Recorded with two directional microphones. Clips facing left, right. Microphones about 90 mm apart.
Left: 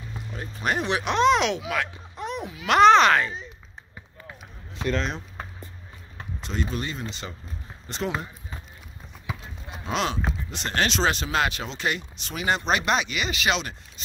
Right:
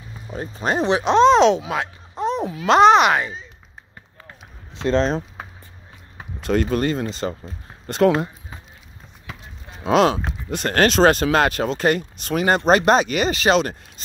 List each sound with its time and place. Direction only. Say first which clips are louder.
0.3 s speech: right 5 dB; 30° right (ahead or behind); by 3.3 s 10° right (ahead or behind)
4.7 s speech: right 8 dB; 30° right (ahead or behind)
6.4 s speech: right 11 dB; 55° right (ahead or behind)
7.8 s speech: right 13 dB; 60° right (ahead or behind)
9.8 s speech: right 10 dB; 50° right (ahead or behind)